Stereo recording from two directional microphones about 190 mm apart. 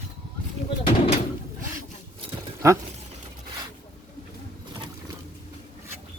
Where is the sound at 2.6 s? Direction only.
15° right (ahead or behind).